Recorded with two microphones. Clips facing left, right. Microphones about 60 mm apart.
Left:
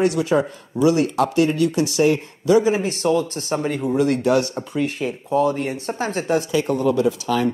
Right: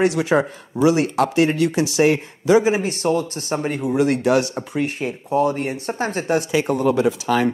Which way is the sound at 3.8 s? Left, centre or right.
Centre.